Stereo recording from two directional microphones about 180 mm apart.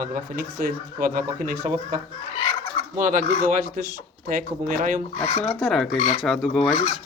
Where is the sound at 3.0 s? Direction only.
45° right (ahead or behind).